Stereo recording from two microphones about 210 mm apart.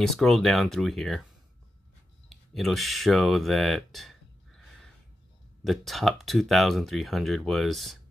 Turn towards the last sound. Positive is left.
turn(degrees=0)  # may be behind; listen again after turning